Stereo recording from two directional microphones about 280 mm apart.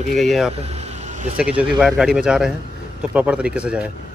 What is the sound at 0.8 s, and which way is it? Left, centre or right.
Insect, right.